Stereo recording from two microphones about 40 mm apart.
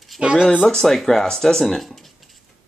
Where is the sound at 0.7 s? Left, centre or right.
Centre.